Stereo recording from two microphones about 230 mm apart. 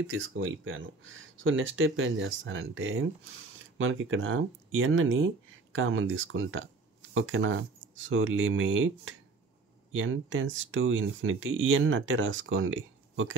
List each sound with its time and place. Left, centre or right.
0.0 s speech: right